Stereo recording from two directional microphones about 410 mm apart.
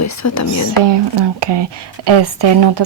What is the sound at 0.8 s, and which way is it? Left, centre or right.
Speech, right.